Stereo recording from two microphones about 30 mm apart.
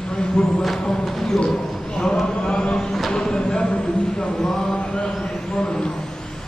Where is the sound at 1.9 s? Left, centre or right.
Left.